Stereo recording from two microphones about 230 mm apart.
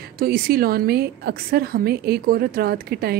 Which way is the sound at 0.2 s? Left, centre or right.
Right.